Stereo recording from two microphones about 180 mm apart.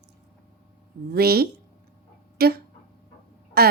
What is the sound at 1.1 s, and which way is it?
A woman's voice, 60° right (ahead or behind).